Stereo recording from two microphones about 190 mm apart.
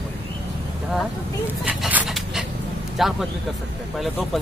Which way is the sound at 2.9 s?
Centre (ahead or behind).